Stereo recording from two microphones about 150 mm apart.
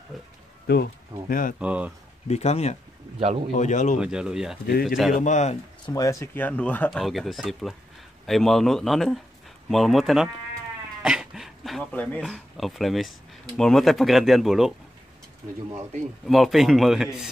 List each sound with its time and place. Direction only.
0.1 s speech: centre (ahead or behind)
0.7 s speech: 90° left
1.6 s speech: 10° right (ahead or behind)
2.2 s speech: 45° left (ahead or behind)
3.2 s speech: 45° right (ahead or behind)
3.5 s speech: 55° left (ahead or behind)
4.0 s speech: 5° right (ahead or behind)
4.6 s speech: 90° left
5.1 s speech: 55° left (ahead or behind)
5.9 s speech: 25° left (ahead or behind); by 10.3 s centre (ahead or behind)
11.0 s throat clearing: 5° right (ahead or behind)
11.9 s speech: 10° left (ahead or behind)
12.3 s speech: centre (ahead or behind)
16.3 s speech: centre (ahead or behind)